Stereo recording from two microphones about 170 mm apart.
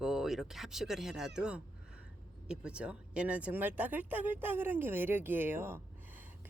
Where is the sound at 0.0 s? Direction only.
Centre (ahead or behind).